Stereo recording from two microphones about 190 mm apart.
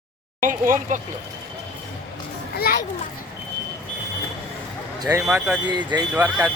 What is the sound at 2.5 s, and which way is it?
Speech, 50° left (ahead or behind).